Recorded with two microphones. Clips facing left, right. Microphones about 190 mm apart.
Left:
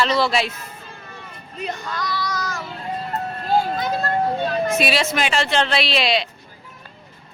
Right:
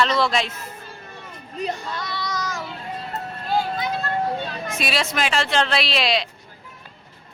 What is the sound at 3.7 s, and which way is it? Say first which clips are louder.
Vehicle: left 3 dB; 45° left (ahead or behind).